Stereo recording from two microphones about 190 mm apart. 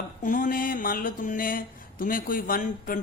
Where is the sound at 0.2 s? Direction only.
45° left (ahead or behind).